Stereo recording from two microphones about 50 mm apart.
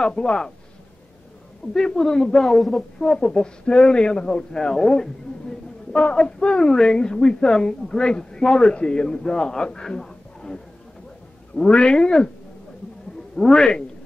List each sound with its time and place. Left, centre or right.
0.0 s a woman's voice: centre
1.7 s a woman's voice: centre
3.0 s a woman's voice: centre
11.7 s speech: centre
13.5 s a woman's voice: centre